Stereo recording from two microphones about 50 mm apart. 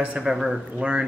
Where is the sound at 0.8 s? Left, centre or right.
Right.